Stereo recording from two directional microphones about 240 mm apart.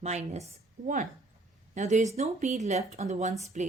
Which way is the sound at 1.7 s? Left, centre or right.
Right.